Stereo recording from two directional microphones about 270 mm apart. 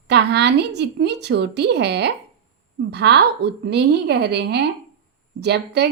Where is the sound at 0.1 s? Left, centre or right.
Right.